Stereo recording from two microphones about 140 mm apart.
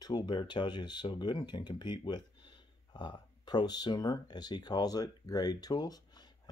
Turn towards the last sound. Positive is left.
turn(degrees=30)  # may be behind; listen again after turning